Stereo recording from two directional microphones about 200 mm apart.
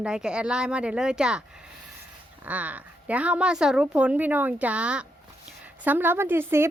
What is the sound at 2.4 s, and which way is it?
A woman's voice, 5° right (ahead or behind).